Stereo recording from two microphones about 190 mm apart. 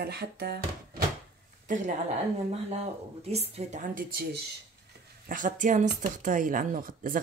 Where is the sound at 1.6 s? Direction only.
40° right (ahead or behind).